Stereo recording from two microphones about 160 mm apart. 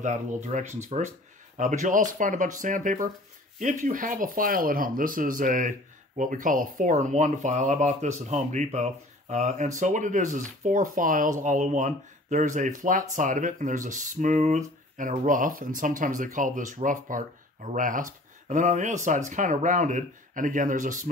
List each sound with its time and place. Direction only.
0.0 s speech: 50° right (ahead or behind)